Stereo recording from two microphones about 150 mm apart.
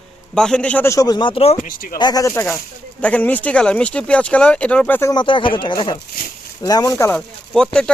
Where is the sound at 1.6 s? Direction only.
75° left (ahead or behind).